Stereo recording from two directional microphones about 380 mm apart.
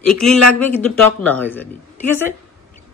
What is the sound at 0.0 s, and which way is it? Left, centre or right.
A man's voice, centre.